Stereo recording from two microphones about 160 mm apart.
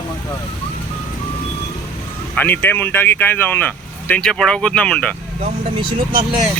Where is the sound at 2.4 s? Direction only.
10° left (ahead or behind).